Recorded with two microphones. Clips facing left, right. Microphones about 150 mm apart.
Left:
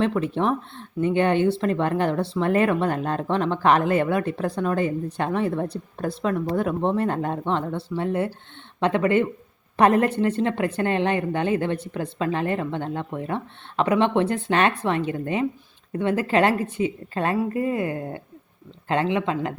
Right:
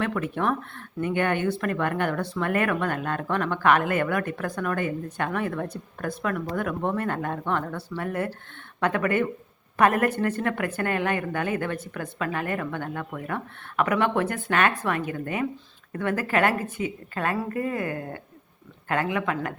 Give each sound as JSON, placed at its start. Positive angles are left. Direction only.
{"t": 0.0, "sound": "speech", "side_deg": 25}